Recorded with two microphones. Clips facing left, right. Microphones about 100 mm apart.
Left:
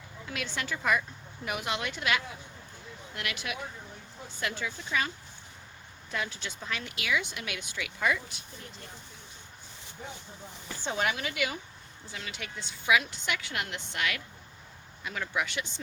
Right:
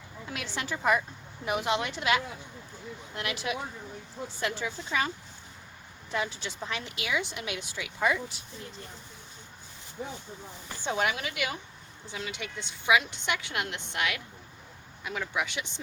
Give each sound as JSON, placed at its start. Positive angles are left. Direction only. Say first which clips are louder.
{"t": 0.3, "sound": "speech", "louder": "even", "side_deg": -25}
{"t": 10.8, "sound": "a woman's voice", "louder": "right 2 dB", "side_deg": -10}